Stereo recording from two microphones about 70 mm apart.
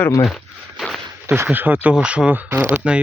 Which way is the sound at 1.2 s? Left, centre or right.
Right.